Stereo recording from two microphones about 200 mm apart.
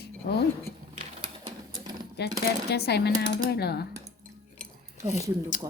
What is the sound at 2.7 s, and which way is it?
Speech, 55° left (ahead or behind).